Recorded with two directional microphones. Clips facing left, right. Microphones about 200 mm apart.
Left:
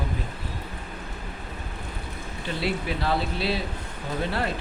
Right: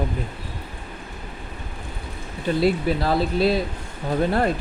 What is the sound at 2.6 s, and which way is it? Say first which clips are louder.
Speech: right 7 dB; 40° right (ahead or behind).